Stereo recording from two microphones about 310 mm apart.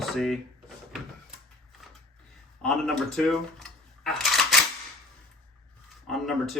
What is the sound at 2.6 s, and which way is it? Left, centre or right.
Dishes, centre.